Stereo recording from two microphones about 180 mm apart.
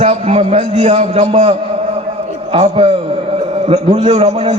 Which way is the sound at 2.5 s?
30° right (ahead or behind).